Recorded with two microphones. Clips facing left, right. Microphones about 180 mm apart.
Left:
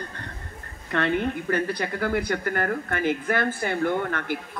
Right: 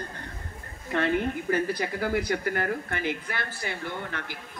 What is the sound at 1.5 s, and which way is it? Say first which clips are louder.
Speech: left 1 dB; 60° left (ahead or behind).